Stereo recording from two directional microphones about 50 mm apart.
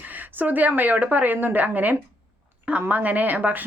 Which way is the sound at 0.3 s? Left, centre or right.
Right.